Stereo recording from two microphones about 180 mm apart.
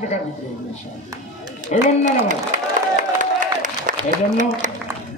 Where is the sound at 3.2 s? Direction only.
45° right (ahead or behind).